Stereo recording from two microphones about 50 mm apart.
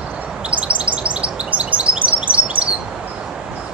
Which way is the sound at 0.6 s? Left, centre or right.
Right.